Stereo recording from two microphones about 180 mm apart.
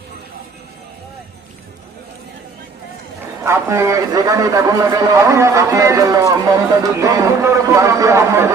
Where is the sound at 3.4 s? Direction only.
15° right (ahead or behind).